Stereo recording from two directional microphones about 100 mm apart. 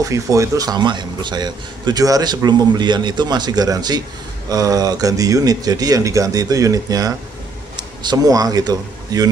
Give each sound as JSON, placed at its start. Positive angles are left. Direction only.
{"t": 0.0, "sound": "speech", "side_deg": -35}